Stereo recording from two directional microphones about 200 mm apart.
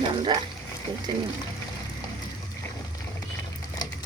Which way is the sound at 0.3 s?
20° right (ahead or behind).